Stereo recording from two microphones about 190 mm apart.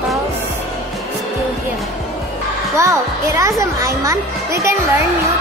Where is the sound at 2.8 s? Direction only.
15° right (ahead or behind).